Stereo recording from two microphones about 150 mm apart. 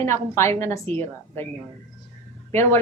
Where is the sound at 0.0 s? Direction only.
15° left (ahead or behind).